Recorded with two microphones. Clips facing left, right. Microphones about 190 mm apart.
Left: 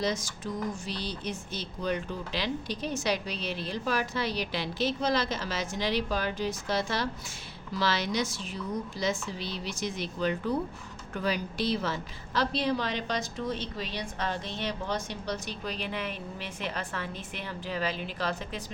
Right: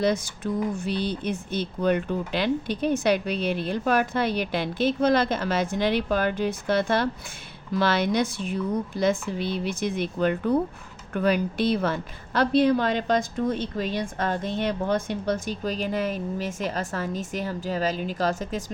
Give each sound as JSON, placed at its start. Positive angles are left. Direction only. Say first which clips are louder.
{"t": 0.0, "sound": "a woman's voice", "louder": "right 7 dB", "side_deg": -60}